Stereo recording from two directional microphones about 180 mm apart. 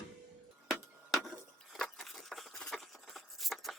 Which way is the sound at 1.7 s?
Centre (ahead or behind).